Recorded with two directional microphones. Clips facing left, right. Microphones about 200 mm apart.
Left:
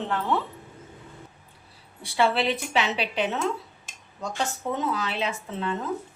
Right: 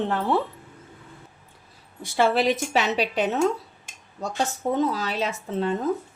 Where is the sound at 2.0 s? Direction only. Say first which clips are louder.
Right 3 dB; 45° right (ahead or behind).